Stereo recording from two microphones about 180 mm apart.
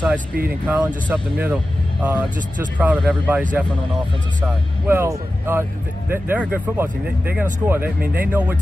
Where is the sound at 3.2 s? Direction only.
10° right (ahead or behind).